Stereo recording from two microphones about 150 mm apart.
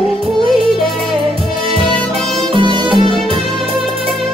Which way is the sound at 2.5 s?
35° right (ahead or behind).